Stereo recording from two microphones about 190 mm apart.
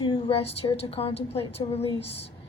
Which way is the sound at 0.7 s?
30° left (ahead or behind).